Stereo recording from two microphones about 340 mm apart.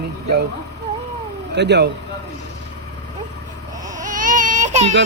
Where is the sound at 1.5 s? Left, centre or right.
Right.